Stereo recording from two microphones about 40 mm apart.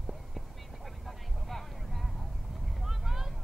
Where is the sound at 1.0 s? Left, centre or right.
Centre.